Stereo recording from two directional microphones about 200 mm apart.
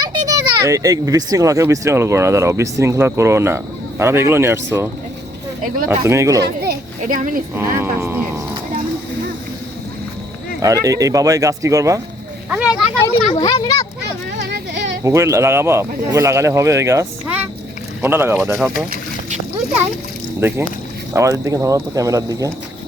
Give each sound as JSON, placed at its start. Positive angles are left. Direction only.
{"t": 0.3, "sound": "speech", "side_deg": -15}
{"t": 6.0, "sound": "speech", "side_deg": -15}
{"t": 6.4, "sound": "a child's voice", "side_deg": -55}
{"t": 7.8, "sound": "speech", "side_deg": -10}
{"t": 10.6, "sound": "speech", "side_deg": -15}
{"t": 12.5, "sound": "a sound", "side_deg": -5}
{"t": 13.3, "sound": "a child's voice", "side_deg": 20}
{"t": 14.3, "sound": "a sound", "side_deg": -60}
{"t": 15.0, "sound": "speech", "side_deg": -15}
{"t": 21.1, "sound": "speech", "side_deg": -15}